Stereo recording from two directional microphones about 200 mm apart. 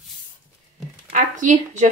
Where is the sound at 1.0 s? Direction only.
40° right (ahead or behind).